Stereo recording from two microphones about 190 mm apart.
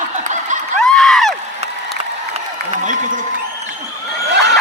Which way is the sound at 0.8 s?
Centre (ahead or behind).